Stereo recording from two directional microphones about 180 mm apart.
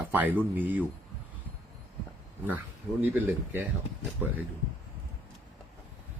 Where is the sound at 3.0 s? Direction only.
10° right (ahead or behind).